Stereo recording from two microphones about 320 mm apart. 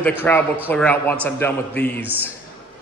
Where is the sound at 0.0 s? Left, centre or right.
Centre.